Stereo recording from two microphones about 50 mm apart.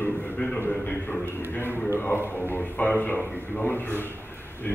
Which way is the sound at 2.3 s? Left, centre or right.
Left.